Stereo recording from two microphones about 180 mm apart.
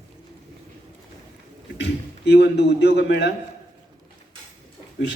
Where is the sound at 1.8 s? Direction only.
70° left (ahead or behind).